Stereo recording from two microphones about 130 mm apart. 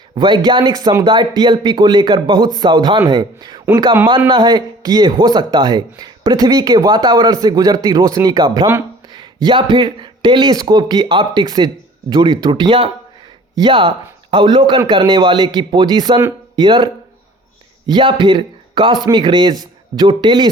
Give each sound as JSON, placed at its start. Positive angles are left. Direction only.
{"t": 0.1, "sound": "speech", "side_deg": -35}